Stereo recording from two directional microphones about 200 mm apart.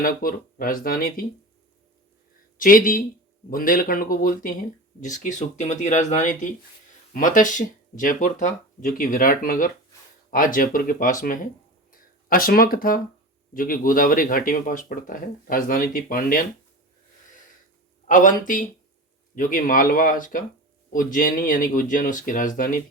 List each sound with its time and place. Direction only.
0.0 s speech: 45° left (ahead or behind)
2.6 s speech: 45° left (ahead or behind)
11.9 s guitar: 45° left (ahead or behind)
13.5 s speech: 45° left (ahead or behind)
18.1 s speech: 40° left (ahead or behind)